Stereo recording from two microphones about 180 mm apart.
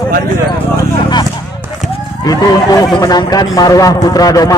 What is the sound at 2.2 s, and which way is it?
Speech, 20° left (ahead or behind).